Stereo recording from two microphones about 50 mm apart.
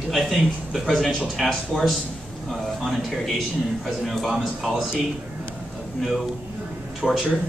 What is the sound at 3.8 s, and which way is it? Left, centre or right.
Speech, centre.